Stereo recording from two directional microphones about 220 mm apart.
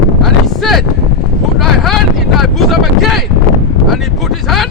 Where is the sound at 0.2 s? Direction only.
Centre (ahead or behind).